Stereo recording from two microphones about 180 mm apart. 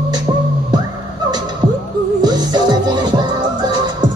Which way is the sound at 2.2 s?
25° right (ahead or behind).